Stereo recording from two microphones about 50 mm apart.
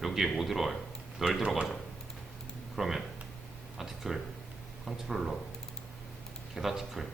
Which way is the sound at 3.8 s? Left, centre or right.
Centre.